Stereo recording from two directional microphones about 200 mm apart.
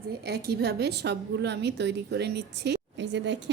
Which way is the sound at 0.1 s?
55° right (ahead or behind).